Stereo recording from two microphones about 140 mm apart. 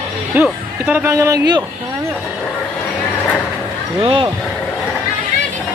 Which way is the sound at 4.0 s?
35° right (ahead or behind).